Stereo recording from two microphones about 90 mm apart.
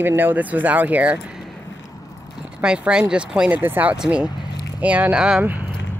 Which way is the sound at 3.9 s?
5° right (ahead or behind).